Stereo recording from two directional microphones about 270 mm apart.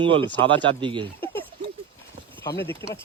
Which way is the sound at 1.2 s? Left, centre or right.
Centre.